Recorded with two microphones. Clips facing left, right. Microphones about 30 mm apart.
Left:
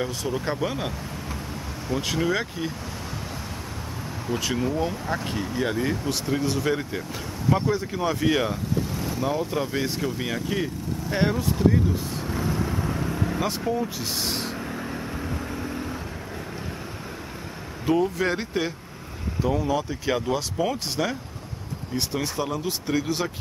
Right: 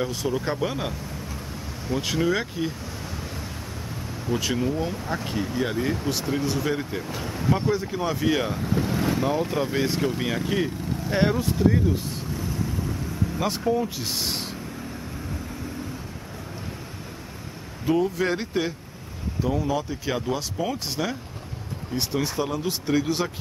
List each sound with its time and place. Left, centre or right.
0.0 s speech: centre
4.3 s speech: centre
8.6 s vehicle: right
9.5 s speech: centre
12.3 s vehicle: left
13.4 s speech: centre
14.7 s vehicle: left
17.8 s speech: centre